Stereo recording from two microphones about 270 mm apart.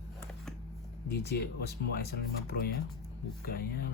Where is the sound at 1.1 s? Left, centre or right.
Left.